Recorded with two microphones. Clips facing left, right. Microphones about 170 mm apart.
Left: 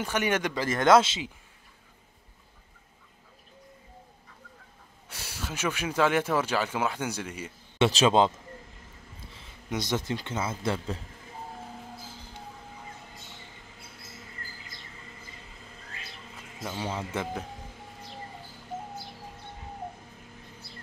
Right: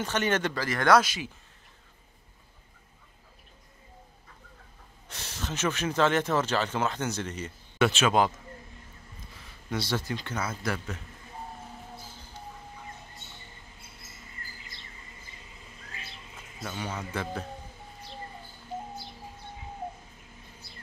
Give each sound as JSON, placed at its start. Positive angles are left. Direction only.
{"t": 0.0, "sound": "speech", "side_deg": 10}
{"t": 5.1, "sound": "speech", "side_deg": 10}
{"t": 7.8, "sound": "speech", "side_deg": 30}
{"t": 9.7, "sound": "speech", "side_deg": 20}
{"t": 16.7, "sound": "speech", "side_deg": 30}